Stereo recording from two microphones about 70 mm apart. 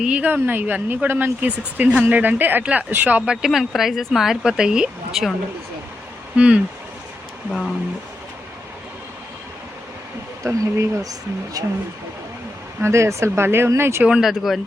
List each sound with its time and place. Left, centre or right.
0.0 s speech: right
1.5 s speech: centre
3.4 s speech: centre
6.3 s speech: centre
10.4 s speech: right
12.8 s speech: right
14.2 s speech: centre